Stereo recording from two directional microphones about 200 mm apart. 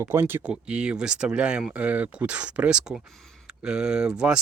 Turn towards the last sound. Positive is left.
turn(degrees=-5)  # may be behind; listen again after turning